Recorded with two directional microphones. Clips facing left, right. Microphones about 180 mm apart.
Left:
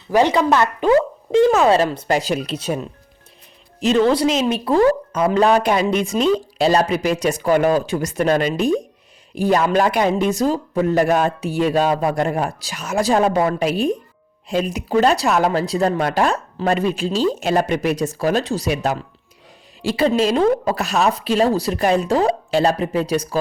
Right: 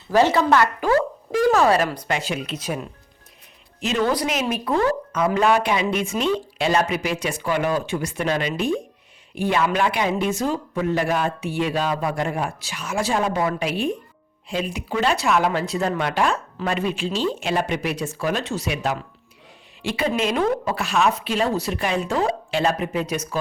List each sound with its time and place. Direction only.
0.1 s speech: 15° left (ahead or behind)
2.1 s speech: 40° left (ahead or behind)